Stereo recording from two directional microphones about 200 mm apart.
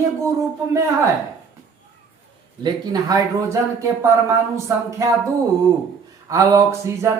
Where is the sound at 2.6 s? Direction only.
20° right (ahead or behind).